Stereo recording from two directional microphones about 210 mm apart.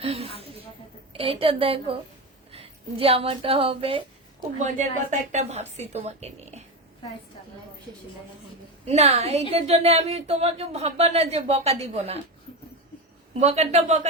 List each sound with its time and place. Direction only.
0.0 s a woman's voice: 30° right (ahead or behind)
8.9 s speech: 30° right (ahead or behind)
13.4 s a woman's voice: 30° right (ahead or behind)